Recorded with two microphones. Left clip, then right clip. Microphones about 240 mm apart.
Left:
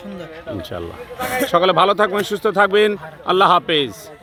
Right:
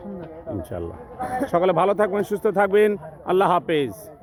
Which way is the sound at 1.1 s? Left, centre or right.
Left.